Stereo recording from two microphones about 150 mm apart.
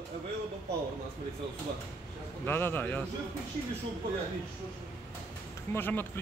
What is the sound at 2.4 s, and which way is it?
Speech, 15° left (ahead or behind).